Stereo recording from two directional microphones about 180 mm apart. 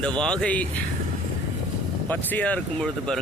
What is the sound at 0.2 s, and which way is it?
Speech, 5° left (ahead or behind).